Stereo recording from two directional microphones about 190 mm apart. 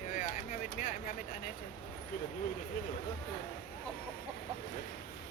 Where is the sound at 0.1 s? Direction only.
45° left (ahead or behind).